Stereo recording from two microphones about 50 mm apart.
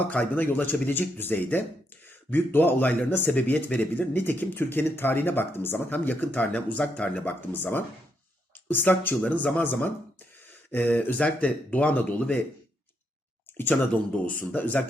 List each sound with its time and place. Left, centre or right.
0.1 s speech: left
7.5 s speech: left
11.2 s speech: left
14.3 s speech: left